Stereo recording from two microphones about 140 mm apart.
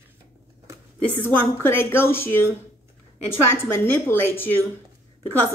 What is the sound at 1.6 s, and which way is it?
Speech, 15° left (ahead or behind).